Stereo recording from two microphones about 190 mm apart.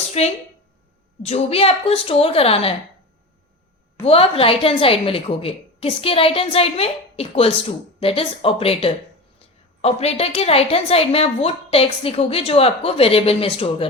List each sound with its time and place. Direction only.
0.2 s a woman's voice: 35° left (ahead or behind)
4.0 s a woman's voice: 30° left (ahead or behind)